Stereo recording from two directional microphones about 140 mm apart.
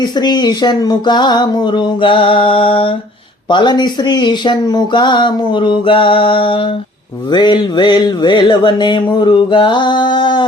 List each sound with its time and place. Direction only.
0.0 s speech: 30° left (ahead or behind)